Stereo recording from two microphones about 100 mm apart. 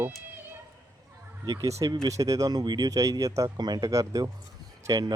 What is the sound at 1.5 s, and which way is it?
Speech, 35° right (ahead or behind).